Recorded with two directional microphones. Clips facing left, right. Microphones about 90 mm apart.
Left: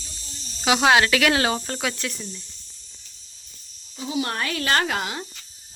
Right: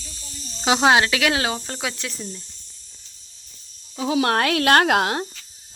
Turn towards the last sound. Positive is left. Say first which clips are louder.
# right 7 dB
turn(degrees=-65)  # may be behind; listen again after turning